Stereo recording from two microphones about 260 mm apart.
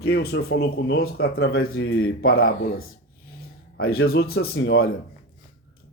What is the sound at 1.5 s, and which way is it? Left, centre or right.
Speech, left.